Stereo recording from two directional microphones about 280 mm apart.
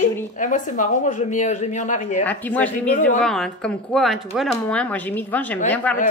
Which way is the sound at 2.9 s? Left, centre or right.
Left.